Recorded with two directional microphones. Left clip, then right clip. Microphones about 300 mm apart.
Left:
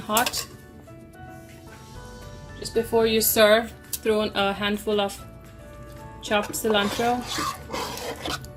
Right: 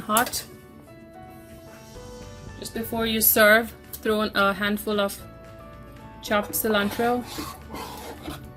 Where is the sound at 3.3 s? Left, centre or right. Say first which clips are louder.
Right 3 dB; right.